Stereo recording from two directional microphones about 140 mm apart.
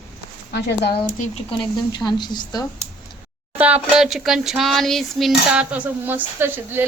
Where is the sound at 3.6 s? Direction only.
10° right (ahead or behind).